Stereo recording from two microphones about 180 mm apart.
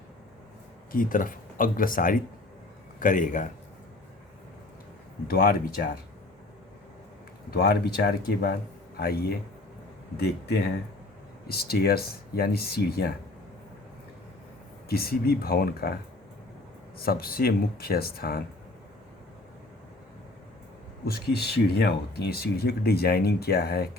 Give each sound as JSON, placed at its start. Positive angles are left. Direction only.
{"t": 0.9, "sound": "speech", "side_deg": 50}
{"t": 5.3, "sound": "speech", "side_deg": 55}
{"t": 7.5, "sound": "speech", "side_deg": 60}
{"t": 14.8, "sound": "speech", "side_deg": 60}
{"t": 17.0, "sound": "speech", "side_deg": 55}
{"t": 21.0, "sound": "speech", "side_deg": 60}